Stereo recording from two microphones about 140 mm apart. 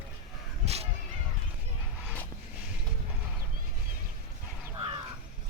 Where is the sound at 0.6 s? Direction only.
50° right (ahead or behind).